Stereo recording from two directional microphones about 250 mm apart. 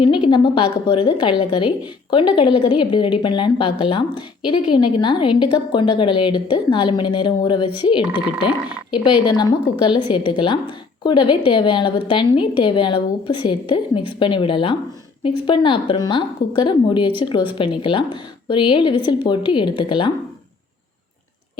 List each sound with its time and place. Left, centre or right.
0.0 s a woman's voice: centre
8.4 s a woman's voice: centre
9.0 s a woman's voice: centre